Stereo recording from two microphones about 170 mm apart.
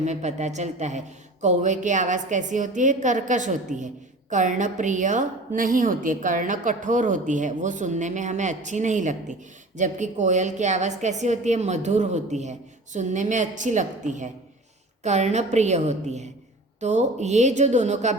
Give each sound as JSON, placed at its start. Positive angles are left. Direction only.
{"t": 0.0, "sound": "a woman's voice", "side_deg": -45}